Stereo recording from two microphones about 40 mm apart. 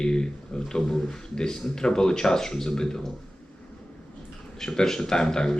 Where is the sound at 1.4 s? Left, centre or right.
Centre.